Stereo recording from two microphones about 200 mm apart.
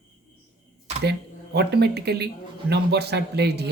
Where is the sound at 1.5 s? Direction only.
55° right (ahead or behind).